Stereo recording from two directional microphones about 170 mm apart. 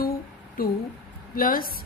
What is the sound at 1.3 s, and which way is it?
Speech, 60° left (ahead or behind).